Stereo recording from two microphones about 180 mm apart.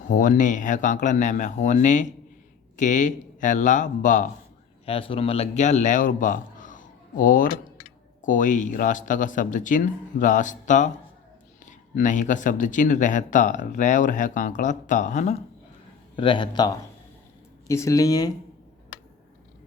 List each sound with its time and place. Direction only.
0.1 s speech: 45° left (ahead or behind)
4.9 s a man's voice: 30° left (ahead or behind)
16.1 s speech: 25° left (ahead or behind)